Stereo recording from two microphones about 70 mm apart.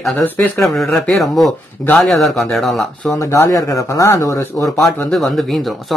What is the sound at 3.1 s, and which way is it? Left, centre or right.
Speech, left.